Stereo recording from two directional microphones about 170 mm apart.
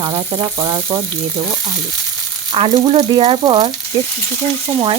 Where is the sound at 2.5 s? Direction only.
35° right (ahead or behind).